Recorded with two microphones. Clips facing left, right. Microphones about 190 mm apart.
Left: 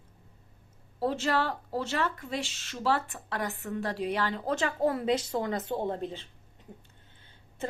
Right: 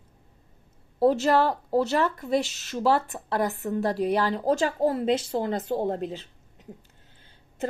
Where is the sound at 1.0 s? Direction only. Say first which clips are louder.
Right 8 dB; 40° right (ahead or behind).